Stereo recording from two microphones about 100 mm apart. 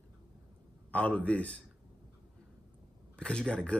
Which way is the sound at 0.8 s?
15° left (ahead or behind).